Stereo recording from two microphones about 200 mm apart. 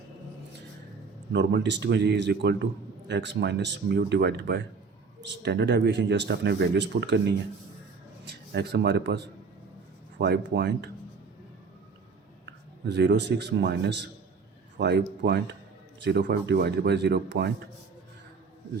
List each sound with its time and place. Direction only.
1.3 s a man's voice: 60° right (ahead or behind)
12.5 s a man's voice: 60° right (ahead or behind)